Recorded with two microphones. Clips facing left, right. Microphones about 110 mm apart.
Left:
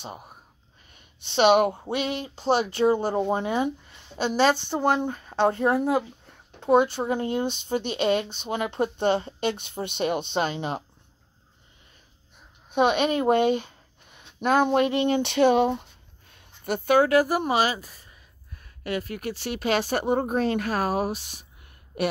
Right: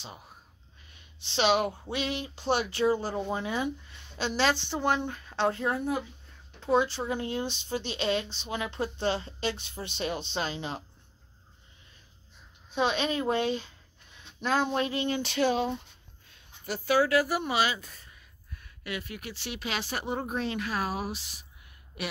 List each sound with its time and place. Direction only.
0.0 s speech: 50° left (ahead or behind)
2.8 s speech: 55° left (ahead or behind)
5.7 s speech: 80° left
6.7 s speech: 50° left (ahead or behind)
12.7 s speech: 55° left (ahead or behind)
17.7 s speech: 10° left (ahead or behind)
18.9 s speech: 45° left (ahead or behind)